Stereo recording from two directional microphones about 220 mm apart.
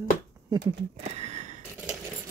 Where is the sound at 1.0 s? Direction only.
30° right (ahead or behind).